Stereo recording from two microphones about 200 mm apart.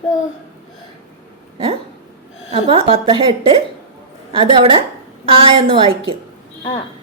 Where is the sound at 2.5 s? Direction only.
25° right (ahead or behind).